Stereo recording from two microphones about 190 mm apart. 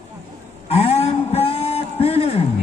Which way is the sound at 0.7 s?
35° left (ahead or behind).